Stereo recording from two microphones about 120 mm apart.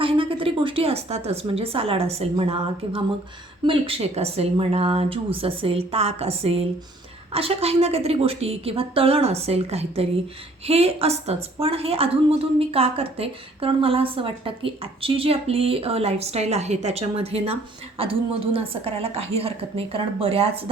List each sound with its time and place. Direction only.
0.0 s a woman's voice: 45° right (ahead or behind)